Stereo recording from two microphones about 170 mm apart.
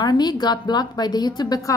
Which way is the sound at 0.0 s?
25° left (ahead or behind).